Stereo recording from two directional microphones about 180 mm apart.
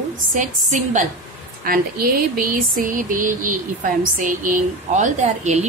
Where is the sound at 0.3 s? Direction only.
45° right (ahead or behind).